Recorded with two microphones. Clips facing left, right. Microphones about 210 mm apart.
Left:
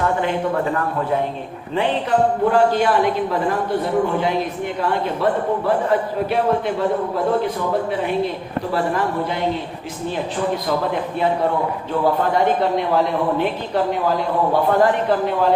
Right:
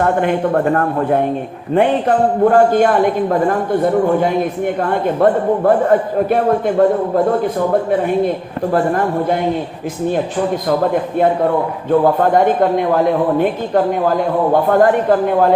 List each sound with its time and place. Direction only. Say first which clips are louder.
0.0 s a man's voice: right 5 dB; 55° right (ahead or behind)